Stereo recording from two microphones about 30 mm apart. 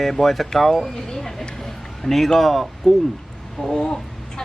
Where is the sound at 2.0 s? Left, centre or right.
Centre.